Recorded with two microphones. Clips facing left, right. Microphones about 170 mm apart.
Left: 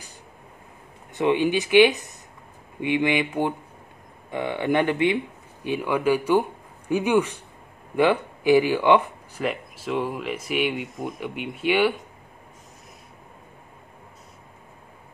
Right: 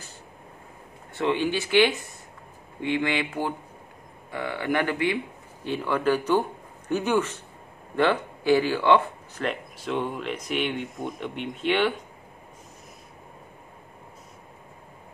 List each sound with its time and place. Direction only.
1.1 s speech: 15° left (ahead or behind)